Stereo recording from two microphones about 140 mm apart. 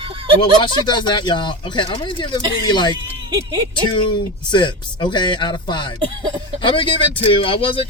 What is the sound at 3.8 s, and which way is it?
Speech, 35° left (ahead or behind).